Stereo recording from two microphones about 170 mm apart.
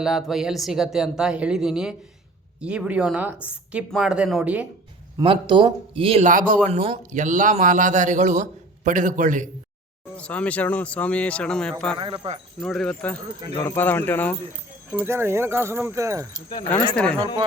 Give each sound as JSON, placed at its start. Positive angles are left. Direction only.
{"t": 0.0, "sound": "a woman's voice", "side_deg": 0}
{"t": 5.2, "sound": "speech", "side_deg": -30}
{"t": 6.2, "sound": "a man's voice", "side_deg": -50}
{"t": 6.7, "sound": "a man's voice", "side_deg": -35}
{"t": 10.2, "sound": "speech", "side_deg": 5}
{"t": 11.9, "sound": "speech", "side_deg": -30}
{"t": 12.5, "sound": "speech", "side_deg": 5}
{"t": 14.9, "sound": "a woman's voice", "side_deg": -15}
{"t": 16.9, "sound": "speech", "side_deg": 5}